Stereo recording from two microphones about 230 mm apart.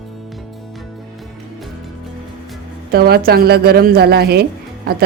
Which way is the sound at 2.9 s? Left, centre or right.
Right.